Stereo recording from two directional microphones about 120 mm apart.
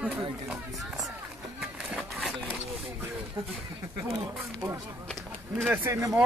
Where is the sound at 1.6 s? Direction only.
Centre (ahead or behind).